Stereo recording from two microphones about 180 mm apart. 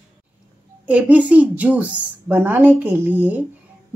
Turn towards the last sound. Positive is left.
turn(degrees=-10)  # may be behind; listen again after turning